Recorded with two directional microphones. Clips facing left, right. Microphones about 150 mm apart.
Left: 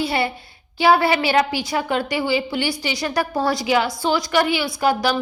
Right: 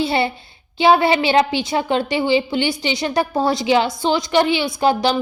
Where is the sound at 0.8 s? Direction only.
20° right (ahead or behind).